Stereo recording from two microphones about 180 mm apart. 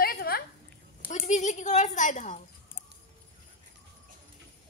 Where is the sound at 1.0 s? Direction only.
40° left (ahead or behind).